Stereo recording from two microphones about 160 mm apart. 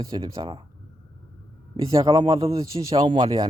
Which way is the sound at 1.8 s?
35° right (ahead or behind).